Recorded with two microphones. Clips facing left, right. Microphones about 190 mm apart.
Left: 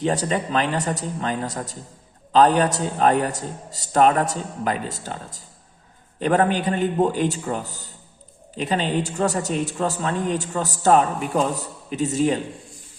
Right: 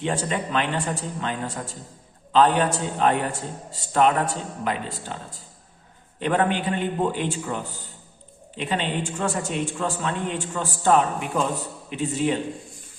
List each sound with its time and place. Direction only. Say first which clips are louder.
0.0 s a woman's voice: left 3 dB; 40° left (ahead or behind)